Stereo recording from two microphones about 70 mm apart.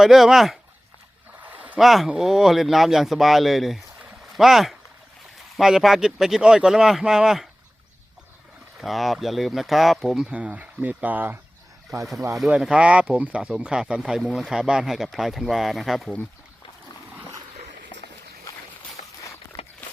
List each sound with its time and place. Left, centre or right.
0.0 s speech: centre
1.4 s a sound: right
1.8 s speech: centre
8.8 s speech: centre
10.2 s speech: centre
12.1 s speech: right
12.5 s speech: centre
14.2 s speech: centre
18.5 s a sound: left
19.8 s a sound: left